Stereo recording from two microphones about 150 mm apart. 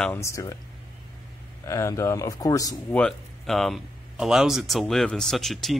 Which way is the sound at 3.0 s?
5° left (ahead or behind).